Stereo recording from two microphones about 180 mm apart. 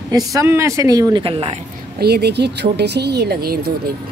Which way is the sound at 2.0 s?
65° right (ahead or behind).